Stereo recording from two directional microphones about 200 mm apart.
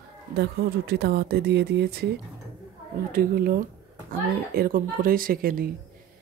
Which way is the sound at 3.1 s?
45° right (ahead or behind).